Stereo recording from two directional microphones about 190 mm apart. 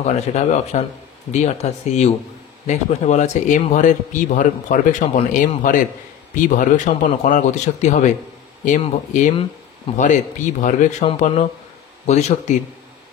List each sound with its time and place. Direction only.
0.0 s a man's voice: 35° left (ahead or behind)